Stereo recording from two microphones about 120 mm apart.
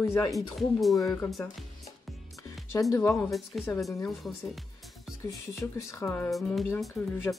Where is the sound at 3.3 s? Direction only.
Centre (ahead or behind).